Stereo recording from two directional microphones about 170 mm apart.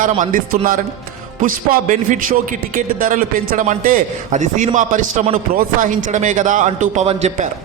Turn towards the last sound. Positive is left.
turn(degrees=-45)  # may be behind; listen again after turning